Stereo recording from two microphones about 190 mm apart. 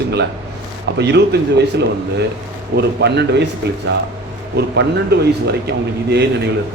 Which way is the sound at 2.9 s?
65° right (ahead or behind).